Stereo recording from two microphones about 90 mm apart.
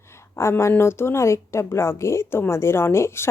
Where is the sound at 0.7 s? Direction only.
25° left (ahead or behind).